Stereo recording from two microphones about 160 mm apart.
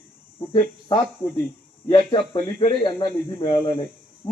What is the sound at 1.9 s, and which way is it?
Speech, 30° left (ahead or behind).